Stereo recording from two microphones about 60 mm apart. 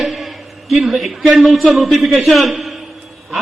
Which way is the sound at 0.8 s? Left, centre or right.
Centre.